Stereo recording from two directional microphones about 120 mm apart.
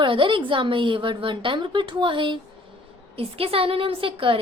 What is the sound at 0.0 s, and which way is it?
A woman's voice, 45° right (ahead or behind).